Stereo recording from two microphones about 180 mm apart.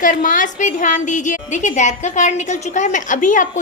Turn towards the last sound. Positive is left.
turn(degrees=45)  # may be behind; listen again after turning